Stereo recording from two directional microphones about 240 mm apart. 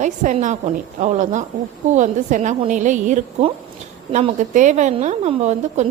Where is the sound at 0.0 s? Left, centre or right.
Right.